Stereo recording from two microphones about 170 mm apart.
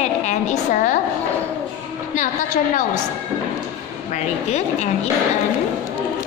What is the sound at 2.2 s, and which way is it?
Speech, 50° left (ahead or behind).